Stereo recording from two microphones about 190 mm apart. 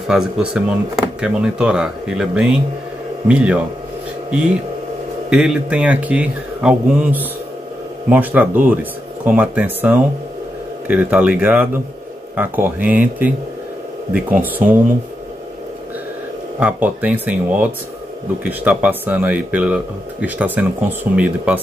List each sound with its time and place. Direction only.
0.1 s speech: 5° right (ahead or behind)
5.3 s speech: 5° right (ahead or behind)
16.5 s speech: 5° right (ahead or behind)